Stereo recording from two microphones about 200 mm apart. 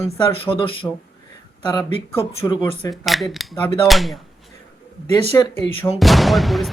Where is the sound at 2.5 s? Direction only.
25° left (ahead or behind).